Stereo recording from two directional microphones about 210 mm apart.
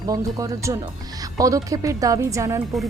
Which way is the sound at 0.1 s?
15° right (ahead or behind).